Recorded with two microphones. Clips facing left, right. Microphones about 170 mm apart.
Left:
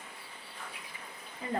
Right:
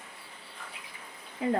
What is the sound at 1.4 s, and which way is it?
Speech, 80° right.